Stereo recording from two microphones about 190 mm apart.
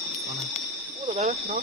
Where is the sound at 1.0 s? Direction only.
40° right (ahead or behind).